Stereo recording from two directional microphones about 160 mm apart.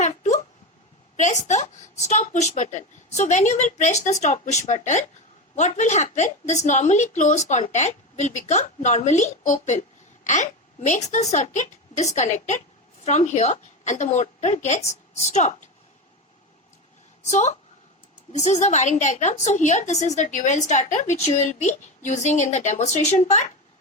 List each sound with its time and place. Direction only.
0.0 s a sound: 45° left (ahead or behind)
1.1 s a woman's voice: 50° left (ahead or behind)
17.3 s a woman's voice: 45° left (ahead or behind)